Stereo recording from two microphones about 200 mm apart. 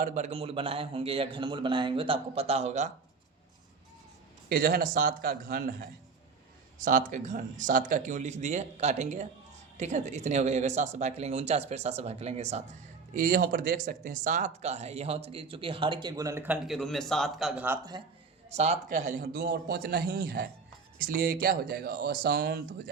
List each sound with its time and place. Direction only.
0.0 s speech: 35° right (ahead or behind)
4.4 s a man's voice: 45° right (ahead or behind)
6.7 s speech: 40° right (ahead or behind)
13.1 s speech: 45° right (ahead or behind); by 17.7 s 5° right (ahead or behind)
18.5 s a man's voice: 35° right (ahead or behind); by 22.6 s 50° right (ahead or behind)